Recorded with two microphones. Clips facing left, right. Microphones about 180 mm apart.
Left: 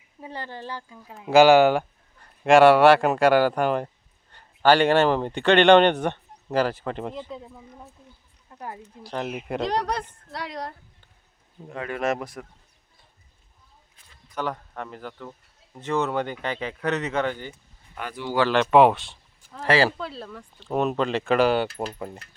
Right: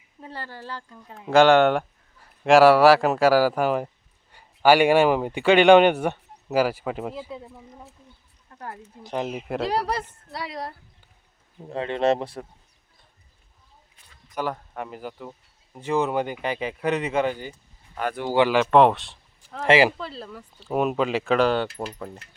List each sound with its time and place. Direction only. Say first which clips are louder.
0.2 s speech: left 2 dB; 15° left (ahead or behind)
0.9 s speech: left 1 dB; centre (ahead or behind)
8.4 s speech: left 1 dB; 15° left (ahead or behind)
9.0 s speech: right 2 dB; 15° right (ahead or behind)
9.3 s speech: left 1 dB; 5° right (ahead or behind)
11.7 s speech: right 4 dB; 30° right (ahead or behind)
14.3 s speech: right 1 dB; 5° right (ahead or behind)
18.0 s speech: right 5 dB; 50° right (ahead or behind)
18.3 s speech: right 2 dB; 10° right (ahead or behind)
18.7 s speech: even; 5° left (ahead or behind)
19.6 s speech: right 3 dB; 20° right (ahead or behind)
20.0 s speech: left 1 dB; centre (ahead or behind)
21.3 s speech: left 1 dB; 10° left (ahead or behind)